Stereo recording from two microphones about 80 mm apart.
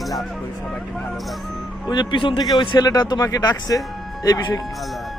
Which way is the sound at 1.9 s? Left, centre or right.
Left.